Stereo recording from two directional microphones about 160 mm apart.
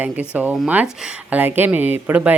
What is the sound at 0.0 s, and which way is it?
Speech, 10° right (ahead or behind).